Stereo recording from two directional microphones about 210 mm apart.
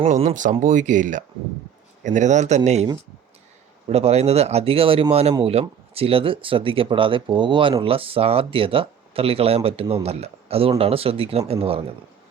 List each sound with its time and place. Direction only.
0.0 s speech: 30° right (ahead or behind)